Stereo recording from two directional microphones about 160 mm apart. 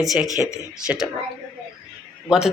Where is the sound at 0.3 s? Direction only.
20° left (ahead or behind).